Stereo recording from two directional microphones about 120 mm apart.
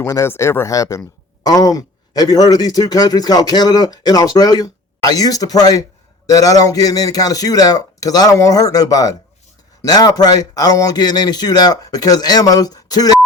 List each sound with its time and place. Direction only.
0.0 s speech: 25° left (ahead or behind)